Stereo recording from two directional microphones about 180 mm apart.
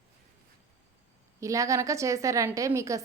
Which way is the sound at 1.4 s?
15° right (ahead or behind).